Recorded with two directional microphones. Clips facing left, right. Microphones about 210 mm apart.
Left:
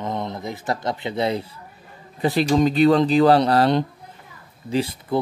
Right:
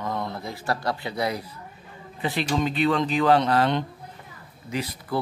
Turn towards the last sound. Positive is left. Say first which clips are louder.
# left 6 dB
turn(degrees=30)  # may be behind; listen again after turning